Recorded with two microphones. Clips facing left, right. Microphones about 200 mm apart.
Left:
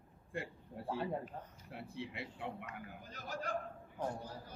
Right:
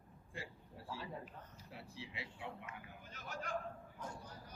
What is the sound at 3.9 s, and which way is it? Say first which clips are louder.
Speech: left 14 dB; 65° left (ahead or behind).